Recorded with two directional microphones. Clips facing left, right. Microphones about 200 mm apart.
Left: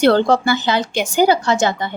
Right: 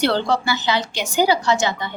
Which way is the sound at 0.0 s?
50° left (ahead or behind).